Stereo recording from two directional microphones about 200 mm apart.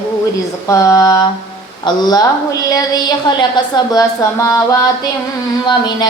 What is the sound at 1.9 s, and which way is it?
Speech, 20° left (ahead or behind).